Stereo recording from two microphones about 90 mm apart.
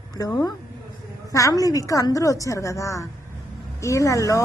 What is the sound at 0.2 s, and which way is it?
A woman's voice, 40° left (ahead or behind).